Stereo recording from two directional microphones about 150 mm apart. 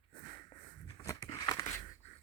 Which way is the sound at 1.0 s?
25° left (ahead or behind).